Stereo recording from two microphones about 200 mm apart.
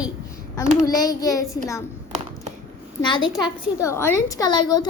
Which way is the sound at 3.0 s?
20° left (ahead or behind).